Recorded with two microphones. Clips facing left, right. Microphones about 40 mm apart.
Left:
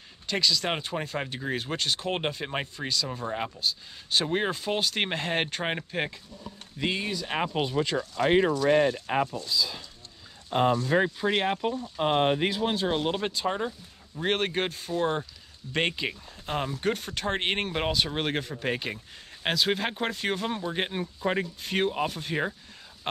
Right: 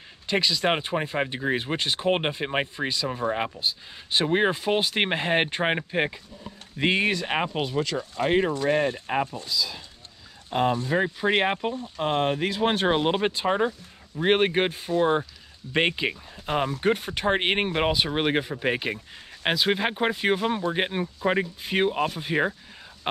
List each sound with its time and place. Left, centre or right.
0.3 s speech: right
6.8 s speech: right
7.4 s speech: centre
8.5 s speech: right
10.9 s speech: centre
11.2 s speech: right
12.0 s speech: centre
12.9 s speech: right